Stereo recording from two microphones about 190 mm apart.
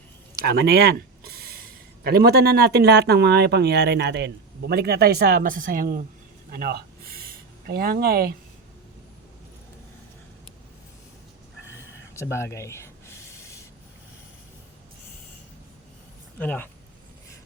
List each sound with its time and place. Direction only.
0.4 s speech: 55° right (ahead or behind)
12.1 s a sound: 15° left (ahead or behind)
16.4 s speech: 10° left (ahead or behind)